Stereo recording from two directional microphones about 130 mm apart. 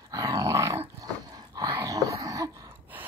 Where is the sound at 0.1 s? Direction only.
25° right (ahead or behind).